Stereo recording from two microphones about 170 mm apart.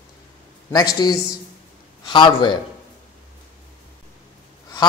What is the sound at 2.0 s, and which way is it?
Speech, 30° left (ahead or behind).